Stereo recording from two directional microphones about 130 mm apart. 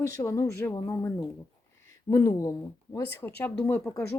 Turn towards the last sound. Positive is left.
turn(degrees=15)  # may be behind; listen again after turning